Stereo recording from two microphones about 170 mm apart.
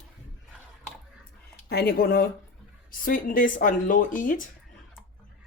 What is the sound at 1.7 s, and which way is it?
Speech, 65° left (ahead or behind).